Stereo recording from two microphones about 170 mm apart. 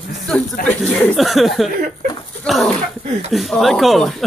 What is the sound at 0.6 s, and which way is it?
Speech, centre (ahead or behind).